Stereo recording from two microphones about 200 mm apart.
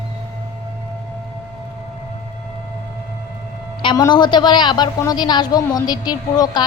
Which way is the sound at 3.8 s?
20° left (ahead or behind).